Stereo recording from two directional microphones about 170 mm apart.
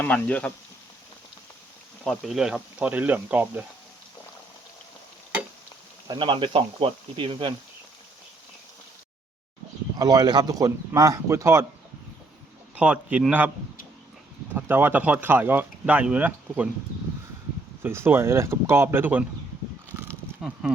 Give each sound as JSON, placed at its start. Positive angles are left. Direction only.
{"t": 0.0, "sound": "speech", "side_deg": 10}
{"t": 2.0, "sound": "speech", "side_deg": 0}
{"t": 6.1, "sound": "speech", "side_deg": -30}
{"t": 10.0, "sound": "speech", "side_deg": -25}
{"t": 12.7, "sound": "speech", "side_deg": -5}
{"t": 14.5, "sound": "speech", "side_deg": -15}
{"t": 17.8, "sound": "speech", "side_deg": -15}
{"t": 20.0, "sound": "a sound", "side_deg": -15}
{"t": 20.4, "sound": "speech", "side_deg": -5}